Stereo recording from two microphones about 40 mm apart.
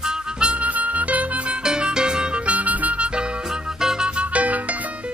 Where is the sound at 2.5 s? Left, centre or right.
Right.